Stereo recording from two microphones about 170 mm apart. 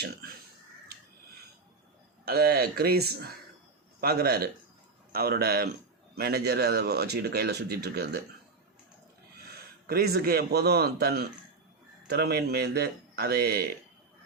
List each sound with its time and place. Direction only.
2.2 s speech: 65° right (ahead or behind)
9.5 s a man's voice: 65° right (ahead or behind)